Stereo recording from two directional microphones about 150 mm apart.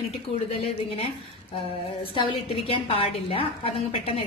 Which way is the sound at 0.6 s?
40° left (ahead or behind).